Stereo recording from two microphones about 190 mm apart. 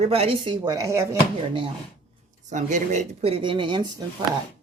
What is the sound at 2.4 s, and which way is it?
Speech, 40° right (ahead or behind).